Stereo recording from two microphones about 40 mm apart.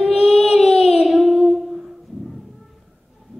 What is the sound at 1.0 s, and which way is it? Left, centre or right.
Child singing, centre.